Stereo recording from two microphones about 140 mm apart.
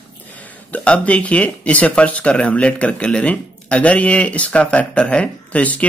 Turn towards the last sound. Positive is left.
turn(degrees=10)  # may be behind; listen again after turning